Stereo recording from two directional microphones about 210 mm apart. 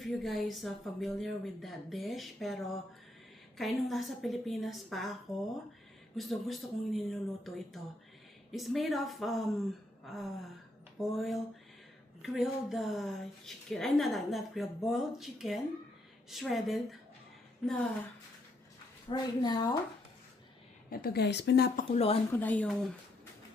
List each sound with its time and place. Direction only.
0.1 s a woman's voice: centre (ahead or behind)
6.1 s a woman's voice: centre (ahead or behind)
19.1 s a woman's voice: 20° left (ahead or behind)
20.9 s speech: 45° left (ahead or behind)
21.9 s a woman's voice: 30° left (ahead or behind)
22.3 s speech: 10° left (ahead or behind)